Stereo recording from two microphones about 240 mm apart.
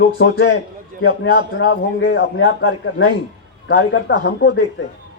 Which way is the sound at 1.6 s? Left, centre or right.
Left.